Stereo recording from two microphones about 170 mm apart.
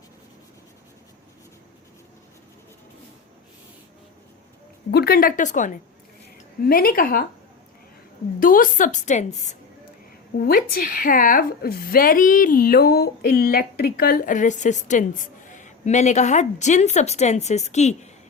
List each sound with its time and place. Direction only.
4.9 s a woman's voice: 65° left (ahead or behind); by 5.8 s 50° left (ahead or behind)
6.7 s a woman's voice: 60° left (ahead or behind)
8.4 s a woman's voice: 55° left (ahead or behind)
10.3 s a woman's voice: 60° left (ahead or behind); by 18.1 s 40° left (ahead or behind)